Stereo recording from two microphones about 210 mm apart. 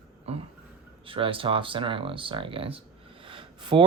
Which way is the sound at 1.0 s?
25° right (ahead or behind).